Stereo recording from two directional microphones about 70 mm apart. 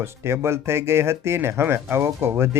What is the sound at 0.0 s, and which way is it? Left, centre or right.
Speech, right.